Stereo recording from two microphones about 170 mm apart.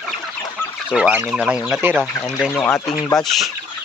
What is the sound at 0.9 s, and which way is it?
Speech, 5° right (ahead or behind).